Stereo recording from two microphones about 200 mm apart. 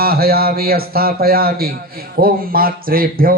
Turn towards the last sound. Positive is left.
turn(degrees=-45)  # may be behind; listen again after turning